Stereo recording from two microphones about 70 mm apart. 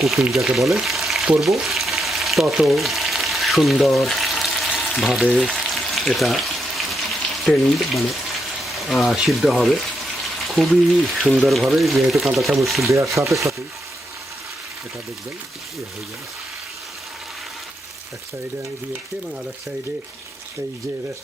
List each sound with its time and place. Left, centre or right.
0.0 s speech: centre
1.6 s frying: centre
8.6 s a sound: centre
9.1 s speech: centre
13.3 s speech: right